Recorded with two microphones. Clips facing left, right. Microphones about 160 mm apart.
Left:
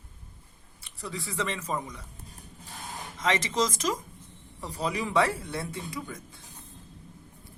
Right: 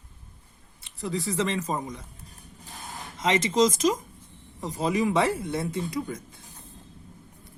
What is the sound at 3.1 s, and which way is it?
Speech, 20° right (ahead or behind).